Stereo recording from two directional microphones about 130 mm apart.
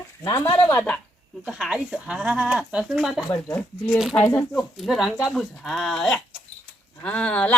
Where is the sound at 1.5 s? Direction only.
5° right (ahead or behind).